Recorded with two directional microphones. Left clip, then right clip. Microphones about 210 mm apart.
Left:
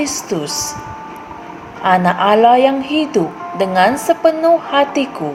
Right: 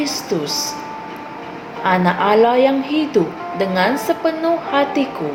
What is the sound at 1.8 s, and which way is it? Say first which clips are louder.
A woman's voice: left 3 dB; 35° left (ahead or behind).